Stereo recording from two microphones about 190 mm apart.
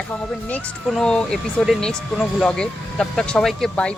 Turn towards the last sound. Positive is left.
turn(degrees=5)  # may be behind; listen again after turning